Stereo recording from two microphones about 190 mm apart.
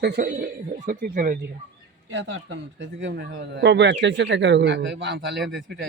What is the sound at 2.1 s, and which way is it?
A man's voice, 75° right (ahead or behind).